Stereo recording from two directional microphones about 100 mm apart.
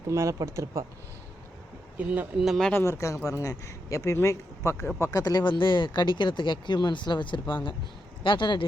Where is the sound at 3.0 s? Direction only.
30° left (ahead or behind).